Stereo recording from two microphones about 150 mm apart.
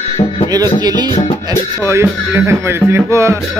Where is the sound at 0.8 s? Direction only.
30° right (ahead or behind).